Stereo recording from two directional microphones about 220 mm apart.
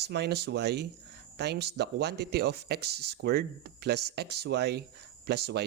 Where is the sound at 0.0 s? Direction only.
50° right (ahead or behind).